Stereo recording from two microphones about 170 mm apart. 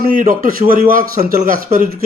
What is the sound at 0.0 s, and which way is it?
Speech, 55° right (ahead or behind).